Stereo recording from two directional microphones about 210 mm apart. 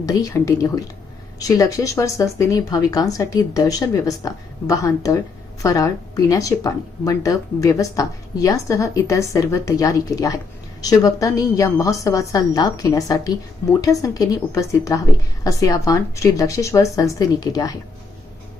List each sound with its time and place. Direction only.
0.0 s speech: 15° left (ahead or behind)